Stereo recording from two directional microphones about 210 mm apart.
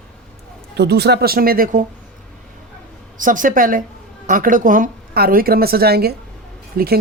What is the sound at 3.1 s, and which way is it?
A woman's voice, 40° right (ahead or behind).